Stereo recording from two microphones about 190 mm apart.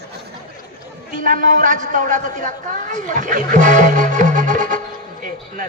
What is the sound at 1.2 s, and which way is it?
A man's voice, 45° right (ahead or behind).